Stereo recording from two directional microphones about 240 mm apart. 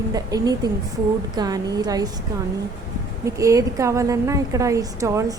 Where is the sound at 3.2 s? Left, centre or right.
Centre.